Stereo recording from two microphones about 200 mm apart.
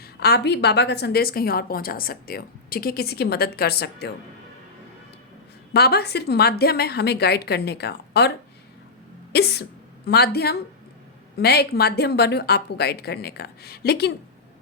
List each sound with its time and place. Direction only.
0.0 s a woman's voice: 55° left (ahead or behind)
5.7 s a woman's voice: 55° left (ahead or behind)
9.3 s a woman's voice: 55° left (ahead or behind)